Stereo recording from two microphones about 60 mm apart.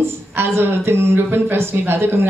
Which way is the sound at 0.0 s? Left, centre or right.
Right.